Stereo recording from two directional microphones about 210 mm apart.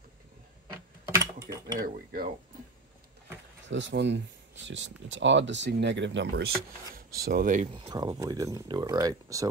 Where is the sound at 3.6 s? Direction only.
60° right (ahead or behind); by 7.6 s 40° right (ahead or behind).